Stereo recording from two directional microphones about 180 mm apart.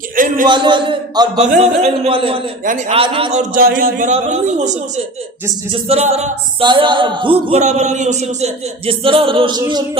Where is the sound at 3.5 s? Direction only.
50° right (ahead or behind).